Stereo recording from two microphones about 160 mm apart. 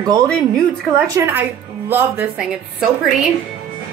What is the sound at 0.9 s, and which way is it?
A woman's voice, 20° right (ahead or behind).